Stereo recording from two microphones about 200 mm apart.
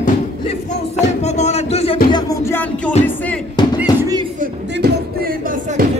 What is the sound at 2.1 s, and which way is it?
Music, 15° left (ahead or behind).